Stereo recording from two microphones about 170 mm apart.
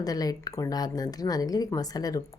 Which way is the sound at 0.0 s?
20° left (ahead or behind).